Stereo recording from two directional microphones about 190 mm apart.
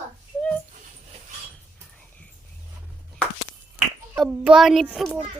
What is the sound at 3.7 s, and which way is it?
A child's voice, 5° right (ahead or behind).